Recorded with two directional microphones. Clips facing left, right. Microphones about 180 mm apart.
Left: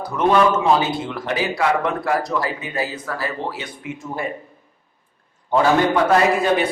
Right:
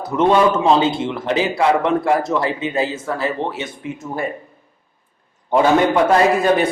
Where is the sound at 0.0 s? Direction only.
25° right (ahead or behind).